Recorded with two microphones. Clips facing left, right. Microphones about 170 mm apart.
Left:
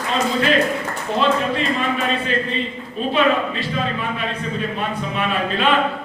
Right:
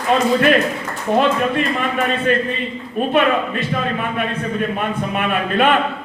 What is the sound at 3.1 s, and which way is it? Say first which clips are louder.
A man's voice: right 1 dB; 55° right (ahead or behind).